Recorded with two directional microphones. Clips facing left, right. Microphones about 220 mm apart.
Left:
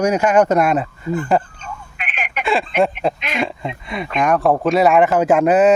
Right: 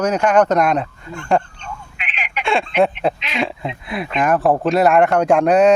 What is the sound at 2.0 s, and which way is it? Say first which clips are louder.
Telephone: left 3 dB; 50° left (ahead or behind).